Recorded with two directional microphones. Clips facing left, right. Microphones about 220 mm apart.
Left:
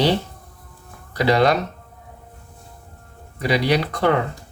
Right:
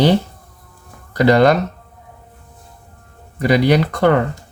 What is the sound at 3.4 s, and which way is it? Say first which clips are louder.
Speech: right 6 dB; 45° right (ahead or behind).